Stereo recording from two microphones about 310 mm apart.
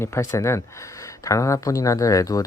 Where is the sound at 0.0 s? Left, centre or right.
Centre.